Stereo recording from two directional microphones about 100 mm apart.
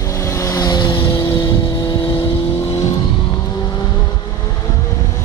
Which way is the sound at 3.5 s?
40° left (ahead or behind).